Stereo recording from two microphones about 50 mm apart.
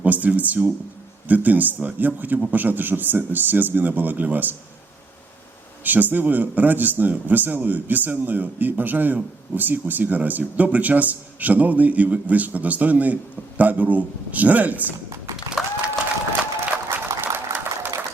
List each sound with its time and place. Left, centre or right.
0.0 s a man's voice: right
5.8 s a man's voice: right
15.6 s applause: centre
16.9 s a sound: right